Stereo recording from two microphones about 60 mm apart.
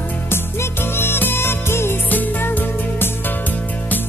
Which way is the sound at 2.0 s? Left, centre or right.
Left.